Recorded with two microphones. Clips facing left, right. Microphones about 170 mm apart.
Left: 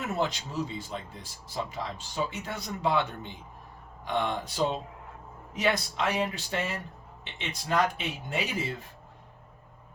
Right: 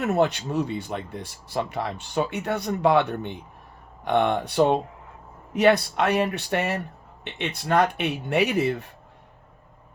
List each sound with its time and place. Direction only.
0.0 s speech: 65° right (ahead or behind)